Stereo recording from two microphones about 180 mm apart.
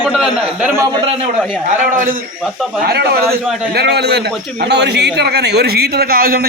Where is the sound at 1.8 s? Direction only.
50° right (ahead or behind).